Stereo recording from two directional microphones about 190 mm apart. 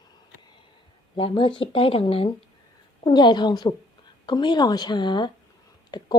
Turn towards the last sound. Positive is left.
turn(degrees=20)  # may be behind; listen again after turning